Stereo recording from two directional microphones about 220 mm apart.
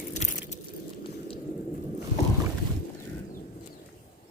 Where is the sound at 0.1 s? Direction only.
35° left (ahead or behind).